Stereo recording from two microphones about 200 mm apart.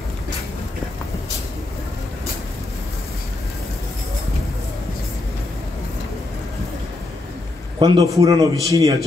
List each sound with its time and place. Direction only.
7.8 s a man's voice: 20° right (ahead or behind)